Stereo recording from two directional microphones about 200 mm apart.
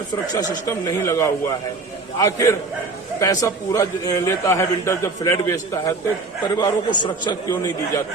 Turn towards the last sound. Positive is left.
turn(degrees=20)  # may be behind; listen again after turning